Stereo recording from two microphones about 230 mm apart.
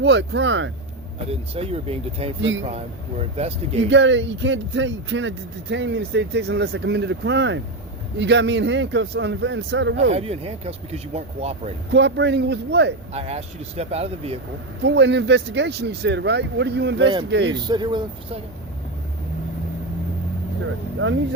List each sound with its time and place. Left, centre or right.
0.0 s speech: right
1.3 s speech: right
2.4 s speech: right
2.6 s speech: right
3.8 s speech: right
10.1 s speech: right
11.9 s speech: right
13.1 s speech: right
14.8 s speech: right
17.0 s speech: right